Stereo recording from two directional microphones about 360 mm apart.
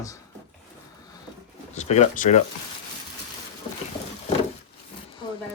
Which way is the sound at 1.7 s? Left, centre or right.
Centre.